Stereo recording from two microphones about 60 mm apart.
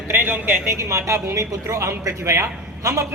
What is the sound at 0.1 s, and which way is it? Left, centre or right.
A woman's voice, right.